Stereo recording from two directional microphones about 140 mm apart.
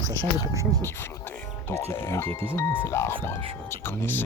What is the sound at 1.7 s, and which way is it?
Speech, 20° left (ahead or behind).